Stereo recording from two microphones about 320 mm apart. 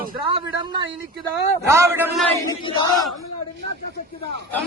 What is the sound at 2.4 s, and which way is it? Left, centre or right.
Choir, centre.